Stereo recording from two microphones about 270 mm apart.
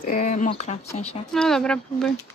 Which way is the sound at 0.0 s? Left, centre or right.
Left.